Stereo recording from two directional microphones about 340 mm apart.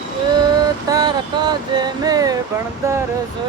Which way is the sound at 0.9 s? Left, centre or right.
Centre.